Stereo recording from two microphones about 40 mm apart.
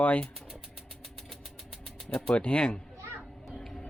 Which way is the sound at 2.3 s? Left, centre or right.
Left.